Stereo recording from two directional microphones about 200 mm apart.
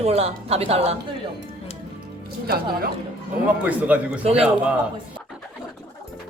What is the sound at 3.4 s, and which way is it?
Speech, 5° right (ahead or behind).